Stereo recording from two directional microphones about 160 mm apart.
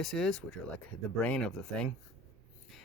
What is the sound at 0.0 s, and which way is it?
Speech, centre (ahead or behind).